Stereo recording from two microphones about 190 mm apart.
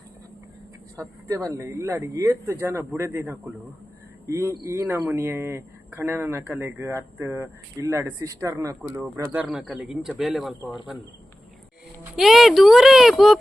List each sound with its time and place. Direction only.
0.9 s speech: 15° right (ahead or behind); by 10.5 s centre (ahead or behind)
12.1 s speech: centre (ahead or behind)